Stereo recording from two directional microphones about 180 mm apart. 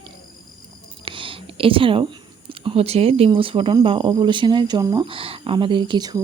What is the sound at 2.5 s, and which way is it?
Speech, 30° right (ahead or behind).